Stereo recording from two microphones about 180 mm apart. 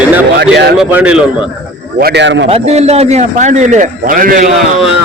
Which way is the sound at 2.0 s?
65° right (ahead or behind).